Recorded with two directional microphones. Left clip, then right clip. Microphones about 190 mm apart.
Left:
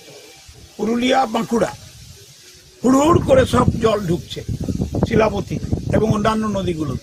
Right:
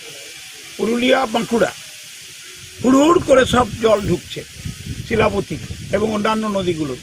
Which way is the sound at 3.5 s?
30° left (ahead or behind).